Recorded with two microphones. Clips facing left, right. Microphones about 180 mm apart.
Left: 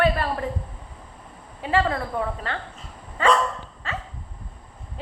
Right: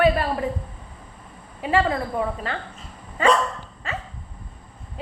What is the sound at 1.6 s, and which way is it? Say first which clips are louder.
Speech: right 1 dB; 15° right (ahead or behind).